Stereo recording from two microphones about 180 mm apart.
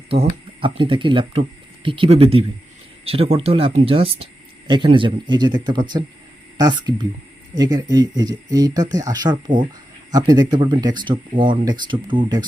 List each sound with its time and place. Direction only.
0.1 s speech: 30° right (ahead or behind)